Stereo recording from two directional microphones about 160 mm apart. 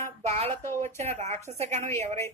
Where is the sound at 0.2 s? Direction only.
45° right (ahead or behind).